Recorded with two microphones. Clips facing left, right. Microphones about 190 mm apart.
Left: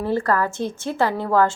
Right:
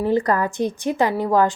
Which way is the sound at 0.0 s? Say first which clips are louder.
Right 2 dB; 15° right (ahead or behind).